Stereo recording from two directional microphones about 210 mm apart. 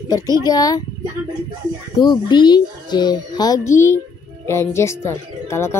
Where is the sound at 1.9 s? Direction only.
20° left (ahead or behind).